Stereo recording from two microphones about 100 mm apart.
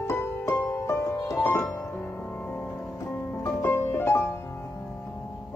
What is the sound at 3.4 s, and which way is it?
Music, 25° left (ahead or behind).